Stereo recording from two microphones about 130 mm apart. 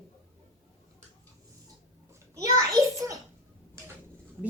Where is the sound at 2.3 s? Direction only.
25° right (ahead or behind).